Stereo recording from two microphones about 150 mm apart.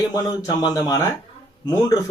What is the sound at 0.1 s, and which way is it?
A man's voice, 25° left (ahead or behind).